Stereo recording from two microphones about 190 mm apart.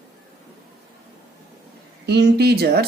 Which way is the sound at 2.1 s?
60° right (ahead or behind).